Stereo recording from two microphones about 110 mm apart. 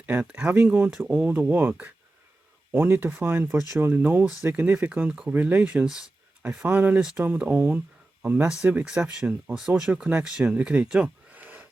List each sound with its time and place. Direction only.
0.0 s speech: 15° right (ahead or behind)